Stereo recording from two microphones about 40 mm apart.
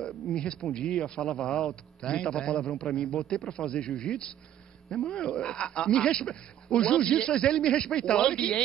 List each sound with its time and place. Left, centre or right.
0.0 s a man's voice: centre